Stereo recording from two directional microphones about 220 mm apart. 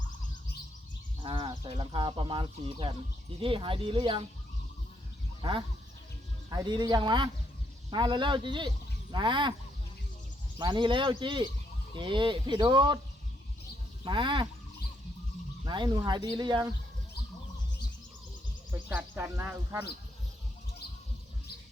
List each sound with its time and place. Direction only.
1.2 s speech: 20° right (ahead or behind)
5.4 s speech: 20° right (ahead or behind)
10.6 s speech: 20° right (ahead or behind)
14.0 s speech: 20° right (ahead or behind)
15.6 s speech: 20° right (ahead or behind)
18.7 s speech: 10° right (ahead or behind)